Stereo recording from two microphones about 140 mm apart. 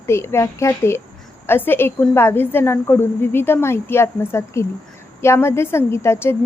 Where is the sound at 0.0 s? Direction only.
20° left (ahead or behind).